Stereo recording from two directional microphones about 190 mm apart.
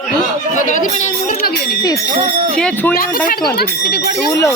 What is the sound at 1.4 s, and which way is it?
Jingle bell, 60° left (ahead or behind).